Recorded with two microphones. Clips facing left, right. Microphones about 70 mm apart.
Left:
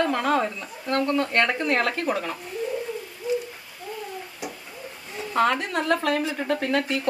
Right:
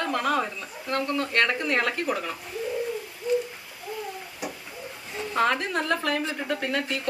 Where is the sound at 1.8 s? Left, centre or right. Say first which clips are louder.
Left 2 dB; centre.